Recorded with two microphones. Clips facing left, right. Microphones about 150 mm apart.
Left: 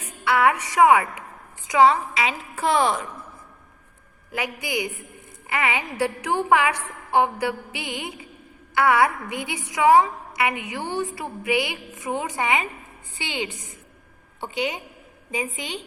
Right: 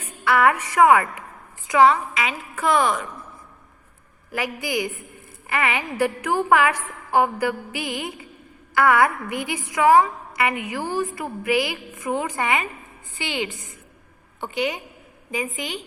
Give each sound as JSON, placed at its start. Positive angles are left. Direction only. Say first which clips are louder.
{"t": 0.3, "sound": "a woman's voice", "louder": "right 1 dB", "side_deg": 20}
{"t": 4.3, "sound": "a woman's voice", "louder": "right 2 dB", "side_deg": 20}